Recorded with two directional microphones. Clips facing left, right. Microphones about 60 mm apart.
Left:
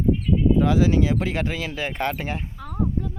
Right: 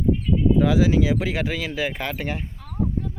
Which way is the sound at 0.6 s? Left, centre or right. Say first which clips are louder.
Right 1 dB; centre.